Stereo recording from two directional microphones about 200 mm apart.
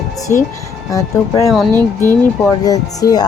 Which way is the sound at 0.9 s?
15° left (ahead or behind).